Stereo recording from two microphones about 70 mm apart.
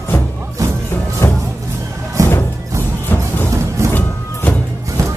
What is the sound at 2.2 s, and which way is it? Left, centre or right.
Music, right.